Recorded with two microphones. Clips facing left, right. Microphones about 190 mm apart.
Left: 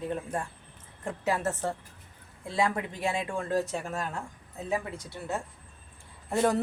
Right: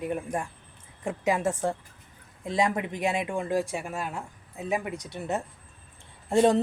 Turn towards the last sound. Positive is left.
turn(degrees=-25)  # may be behind; listen again after turning